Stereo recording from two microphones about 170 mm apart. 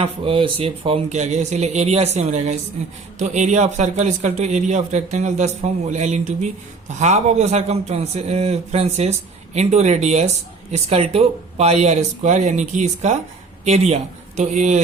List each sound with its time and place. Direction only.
0.0 s a man's voice: 30° right (ahead or behind)